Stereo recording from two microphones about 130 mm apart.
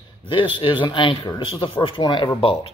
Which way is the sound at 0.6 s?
40° left (ahead or behind).